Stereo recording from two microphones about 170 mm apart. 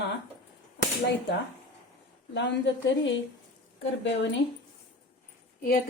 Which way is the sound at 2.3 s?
90° left.